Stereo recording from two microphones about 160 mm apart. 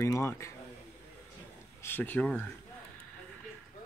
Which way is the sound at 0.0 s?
20° left (ahead or behind).